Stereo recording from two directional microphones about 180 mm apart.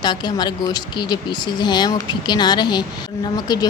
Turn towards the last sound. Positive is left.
turn(degrees=20)  # may be behind; listen again after turning